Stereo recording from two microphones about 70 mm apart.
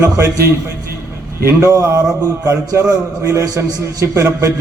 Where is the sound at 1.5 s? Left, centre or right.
Right.